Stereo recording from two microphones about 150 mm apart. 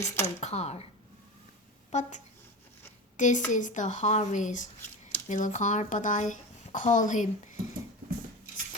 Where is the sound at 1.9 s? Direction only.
55° left (ahead or behind).